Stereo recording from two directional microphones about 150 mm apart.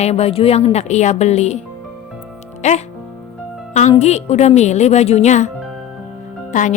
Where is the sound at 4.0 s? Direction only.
45° left (ahead or behind).